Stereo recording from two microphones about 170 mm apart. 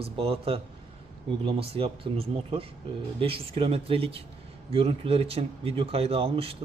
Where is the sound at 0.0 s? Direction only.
35° right (ahead or behind).